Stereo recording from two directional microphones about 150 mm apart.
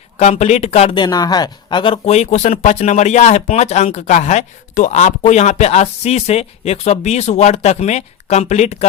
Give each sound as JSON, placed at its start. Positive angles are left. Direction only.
{"t": 0.2, "sound": "speech", "side_deg": 50}
{"t": 0.9, "sound": "speech", "side_deg": 25}